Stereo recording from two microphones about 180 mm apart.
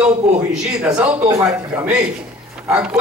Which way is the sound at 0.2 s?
5° right (ahead or behind).